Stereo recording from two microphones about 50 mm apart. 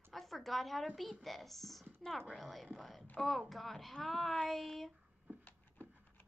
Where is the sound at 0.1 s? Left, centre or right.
Centre.